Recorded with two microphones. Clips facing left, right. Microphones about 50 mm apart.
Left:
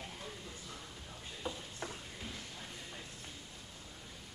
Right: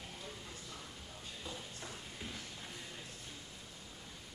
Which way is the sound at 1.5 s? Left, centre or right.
Left.